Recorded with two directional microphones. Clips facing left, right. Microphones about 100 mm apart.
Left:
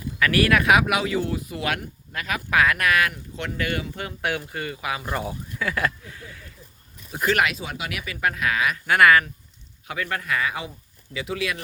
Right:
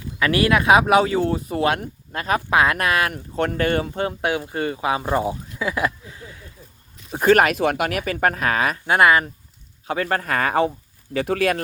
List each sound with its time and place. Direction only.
0.2 s speech: 25° right (ahead or behind)
3.1 s speech: 45° right (ahead or behind); by 5.1 s 30° right (ahead or behind)
5.1 s a sound: 20° right (ahead or behind)
7.1 s speech: 40° right (ahead or behind)
7.5 s speech: 65° right (ahead or behind)
7.9 s speech: 45° right (ahead or behind)
8.9 s speech: 25° right (ahead or behind)
9.8 s speech: 35° right (ahead or behind)